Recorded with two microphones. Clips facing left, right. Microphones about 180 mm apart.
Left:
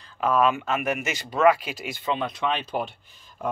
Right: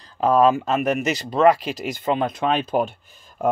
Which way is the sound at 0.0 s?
35° right (ahead or behind).